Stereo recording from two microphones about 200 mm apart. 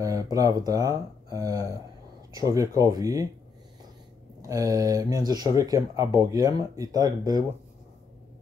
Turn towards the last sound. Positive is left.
turn(degrees=-20)  # may be behind; listen again after turning